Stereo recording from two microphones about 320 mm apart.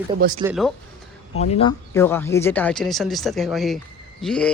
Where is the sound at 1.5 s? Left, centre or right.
Centre.